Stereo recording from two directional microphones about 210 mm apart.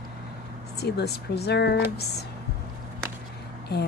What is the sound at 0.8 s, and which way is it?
Speech, 50° left (ahead or behind).